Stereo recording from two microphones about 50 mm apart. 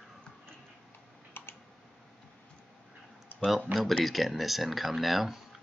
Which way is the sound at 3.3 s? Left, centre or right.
Centre.